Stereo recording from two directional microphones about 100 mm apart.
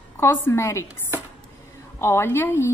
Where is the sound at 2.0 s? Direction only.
25° left (ahead or behind).